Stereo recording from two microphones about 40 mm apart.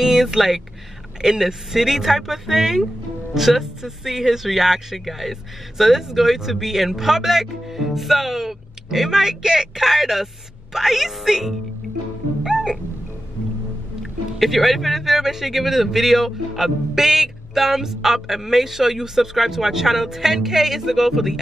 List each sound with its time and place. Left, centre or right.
0.0 s a man's voice: centre
12.4 s music: centre
14.4 s a man's voice: centre